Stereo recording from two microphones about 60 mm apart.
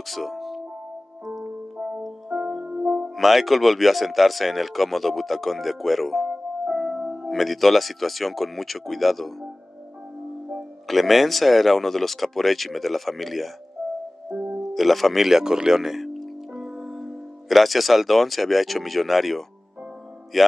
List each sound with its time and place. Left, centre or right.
0.0 s music: centre
1.8 s music: centre
2.8 s music: right
3.2 s speech: centre
6.2 s music: right
7.2 s speech: centre
10.9 s speech: centre
14.7 s speech: centre